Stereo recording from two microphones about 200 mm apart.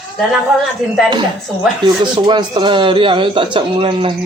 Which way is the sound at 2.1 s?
25° right (ahead or behind).